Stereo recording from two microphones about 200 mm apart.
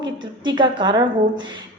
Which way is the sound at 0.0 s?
25° right (ahead or behind).